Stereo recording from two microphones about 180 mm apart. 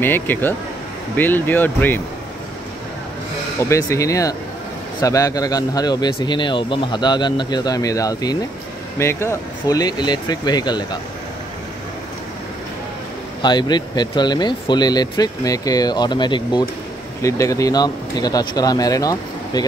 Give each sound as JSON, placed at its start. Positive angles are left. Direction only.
{"t": 0.0, "sound": "speech", "side_deg": 10}
{"t": 3.6, "sound": "speech", "side_deg": 15}
{"t": 13.4, "sound": "speech", "side_deg": 25}